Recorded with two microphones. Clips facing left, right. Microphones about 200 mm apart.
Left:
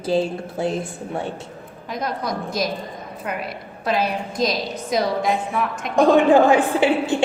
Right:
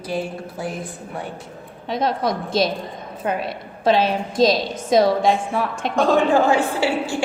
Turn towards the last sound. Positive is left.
turn(degrees=20)  # may be behind; listen again after turning